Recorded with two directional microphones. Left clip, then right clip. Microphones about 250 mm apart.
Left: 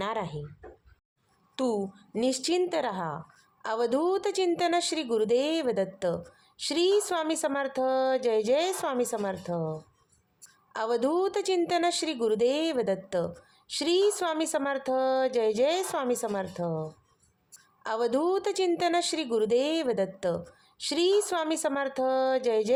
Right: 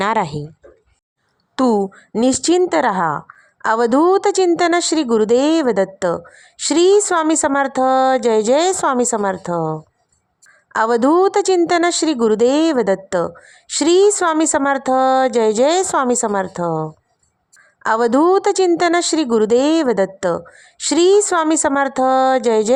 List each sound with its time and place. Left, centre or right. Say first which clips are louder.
0.0 s speech: right 14 dB; right
1.5 s a woman's voice: right 13 dB; right